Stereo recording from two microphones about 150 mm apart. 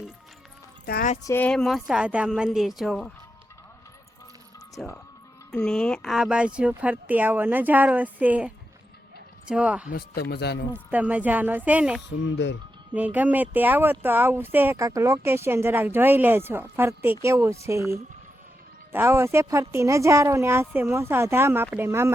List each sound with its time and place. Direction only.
1.2 s a woman's voice: 15° left (ahead or behind)
4.8 s speech: 5° left (ahead or behind)
9.9 s speech: 90° left
10.9 s speech: 10° right (ahead or behind)